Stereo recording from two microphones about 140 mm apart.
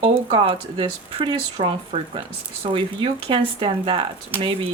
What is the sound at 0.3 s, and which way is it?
Speech, 40° right (ahead or behind).